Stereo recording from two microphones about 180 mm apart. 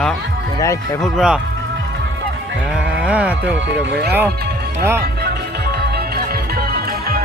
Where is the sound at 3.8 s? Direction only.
65° right (ahead or behind).